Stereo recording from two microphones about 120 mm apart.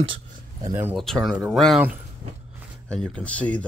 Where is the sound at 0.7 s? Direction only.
20° right (ahead or behind).